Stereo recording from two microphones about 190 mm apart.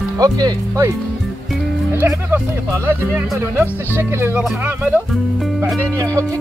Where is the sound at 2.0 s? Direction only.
10° right (ahead or behind).